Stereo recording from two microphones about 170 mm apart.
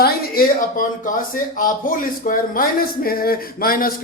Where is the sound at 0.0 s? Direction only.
55° left (ahead or behind).